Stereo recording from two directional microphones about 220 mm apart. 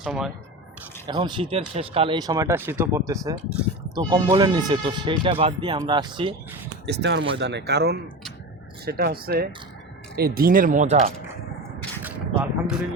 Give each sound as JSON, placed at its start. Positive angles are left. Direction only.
{"t": 0.0, "sound": "speech", "side_deg": 0}
{"t": 1.0, "sound": "speech", "side_deg": -20}
{"t": 6.8, "sound": "speech", "side_deg": -55}
{"t": 12.0, "sound": "a sound", "side_deg": -10}